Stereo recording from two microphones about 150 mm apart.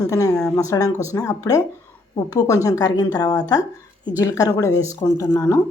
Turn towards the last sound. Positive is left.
turn(degrees=25)  # may be behind; listen again after turning